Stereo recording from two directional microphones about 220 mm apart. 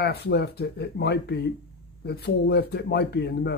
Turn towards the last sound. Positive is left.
turn(degrees=45)  # may be behind; listen again after turning